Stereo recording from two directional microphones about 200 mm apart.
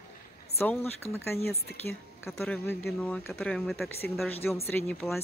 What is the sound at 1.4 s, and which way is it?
Speech, 50° left (ahead or behind).